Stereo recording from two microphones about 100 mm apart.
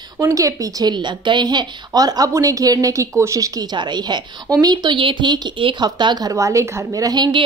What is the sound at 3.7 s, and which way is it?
A woman's voice, 45° right (ahead or behind).